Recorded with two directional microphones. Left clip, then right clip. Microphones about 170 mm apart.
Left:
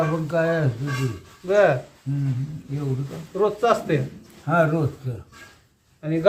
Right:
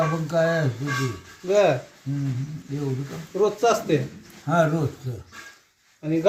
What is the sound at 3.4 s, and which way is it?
Speech, 35° right (ahead or behind).